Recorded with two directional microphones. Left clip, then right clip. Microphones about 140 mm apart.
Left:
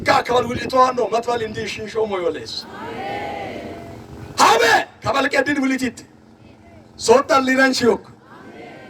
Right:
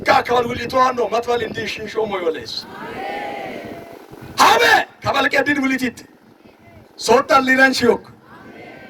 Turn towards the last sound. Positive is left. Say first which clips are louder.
# right 2 dB
turn(degrees=-50)  # may be behind; listen again after turning